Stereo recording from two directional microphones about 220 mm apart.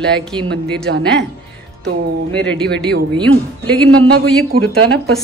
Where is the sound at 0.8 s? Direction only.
55° right (ahead or behind).